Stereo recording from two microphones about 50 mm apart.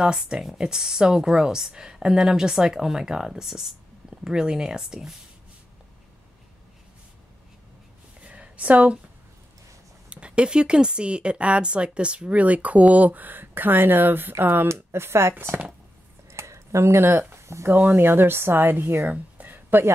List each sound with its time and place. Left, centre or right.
0.0 s speech: centre
8.2 s a sound: right
10.0 s speech: right
14.7 s speech: right
16.3 s a sound: right
17.6 s speech: right